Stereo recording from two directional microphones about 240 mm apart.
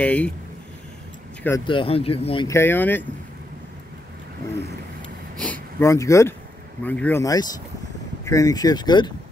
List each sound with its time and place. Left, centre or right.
0.0 s speech: centre
1.6 s speech: left
5.4 s speech: centre